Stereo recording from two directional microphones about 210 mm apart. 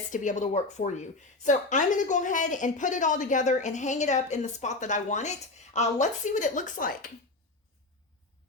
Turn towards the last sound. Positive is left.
turn(degrees=40)  # may be behind; listen again after turning